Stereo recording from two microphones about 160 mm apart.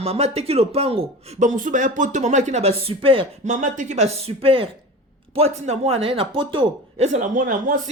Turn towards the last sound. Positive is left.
turn(degrees=-55)  # may be behind; listen again after turning